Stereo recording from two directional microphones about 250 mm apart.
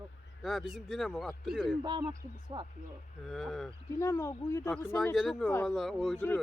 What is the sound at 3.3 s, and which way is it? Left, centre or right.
Speech, centre.